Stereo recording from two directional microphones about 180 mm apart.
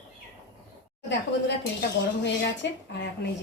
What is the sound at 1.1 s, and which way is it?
Speech, 75° left (ahead or behind).